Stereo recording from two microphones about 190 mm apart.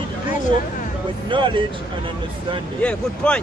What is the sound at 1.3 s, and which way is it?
Speech, 25° right (ahead or behind).